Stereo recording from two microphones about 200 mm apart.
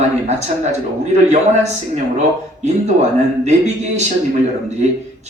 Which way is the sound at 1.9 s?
35° right (ahead or behind).